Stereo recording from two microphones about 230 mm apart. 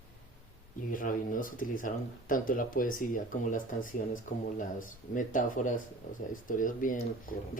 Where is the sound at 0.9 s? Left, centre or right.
Left.